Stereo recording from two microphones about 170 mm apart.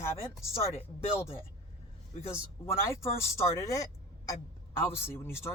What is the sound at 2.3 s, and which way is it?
Speech, 15° left (ahead or behind).